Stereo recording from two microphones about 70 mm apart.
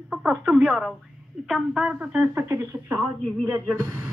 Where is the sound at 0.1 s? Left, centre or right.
Centre.